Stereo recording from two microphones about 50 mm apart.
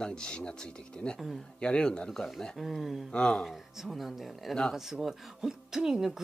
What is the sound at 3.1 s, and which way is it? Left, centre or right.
Speech, centre.